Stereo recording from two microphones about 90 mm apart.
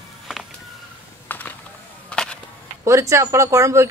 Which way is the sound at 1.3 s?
20° left (ahead or behind).